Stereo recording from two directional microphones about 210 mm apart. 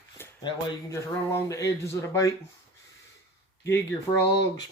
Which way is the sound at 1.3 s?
15° left (ahead or behind).